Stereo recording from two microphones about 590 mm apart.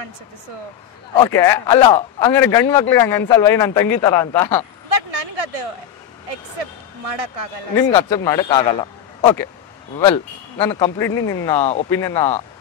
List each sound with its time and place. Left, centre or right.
1.1 s speech: centre
4.8 s a sound: right
6.6 s speech: right
7.7 s speech: centre
9.9 s speech: centre